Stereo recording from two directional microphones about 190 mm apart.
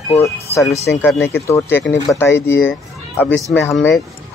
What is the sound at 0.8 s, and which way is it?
Speech, 15° left (ahead or behind).